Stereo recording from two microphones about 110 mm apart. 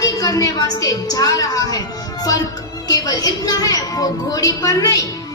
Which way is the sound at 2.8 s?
35° left (ahead or behind).